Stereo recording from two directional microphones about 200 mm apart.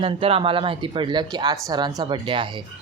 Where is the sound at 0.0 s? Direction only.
30° right (ahead or behind).